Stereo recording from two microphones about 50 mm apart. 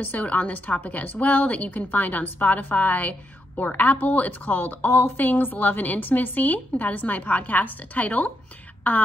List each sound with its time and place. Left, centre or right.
0.0 s a woman's voice: left